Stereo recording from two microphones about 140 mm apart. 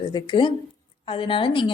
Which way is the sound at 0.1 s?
35° left (ahead or behind).